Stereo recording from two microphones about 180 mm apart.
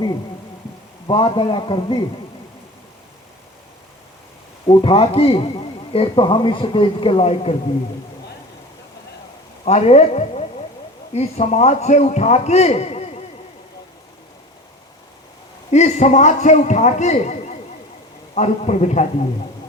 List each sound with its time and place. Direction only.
1.0 s a man's voice: 25° left (ahead or behind)
4.6 s a man's voice: 30° left (ahead or behind)
9.6 s a man's voice: 35° left (ahead or behind)
15.7 s a man's voice: 40° left (ahead or behind)